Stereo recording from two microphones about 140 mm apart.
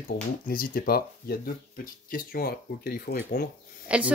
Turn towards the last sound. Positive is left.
turn(degrees=-10)  # may be behind; listen again after turning